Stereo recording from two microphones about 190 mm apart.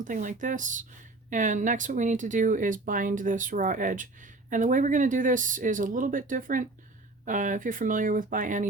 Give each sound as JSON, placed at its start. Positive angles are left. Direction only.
{"t": 0.0, "sound": "speech", "side_deg": -45}